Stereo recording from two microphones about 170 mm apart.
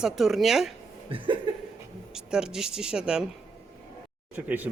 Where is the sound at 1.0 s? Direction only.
30° right (ahead or behind).